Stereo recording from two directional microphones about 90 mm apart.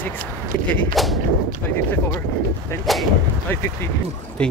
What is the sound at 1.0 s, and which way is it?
Speech, centre (ahead or behind).